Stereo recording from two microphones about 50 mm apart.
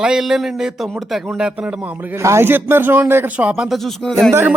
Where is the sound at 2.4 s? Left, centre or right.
Right.